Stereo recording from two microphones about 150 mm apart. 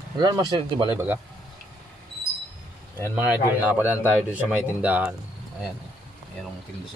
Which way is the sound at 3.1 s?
10° right (ahead or behind).